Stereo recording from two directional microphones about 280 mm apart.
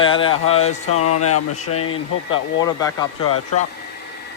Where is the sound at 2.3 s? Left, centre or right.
Centre.